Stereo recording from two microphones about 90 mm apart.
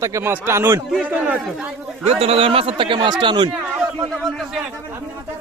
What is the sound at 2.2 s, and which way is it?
Speech, 90° right.